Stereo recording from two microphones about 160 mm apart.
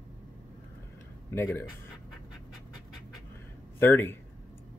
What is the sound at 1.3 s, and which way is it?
Speech, 15° left (ahead or behind).